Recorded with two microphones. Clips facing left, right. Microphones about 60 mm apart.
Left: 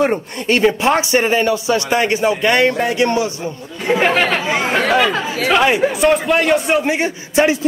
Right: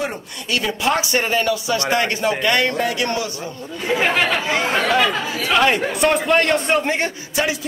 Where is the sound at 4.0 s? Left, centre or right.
Left.